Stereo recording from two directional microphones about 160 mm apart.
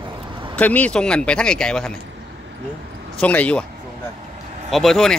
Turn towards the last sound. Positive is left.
turn(degrees=0)  # may be behind; listen again after turning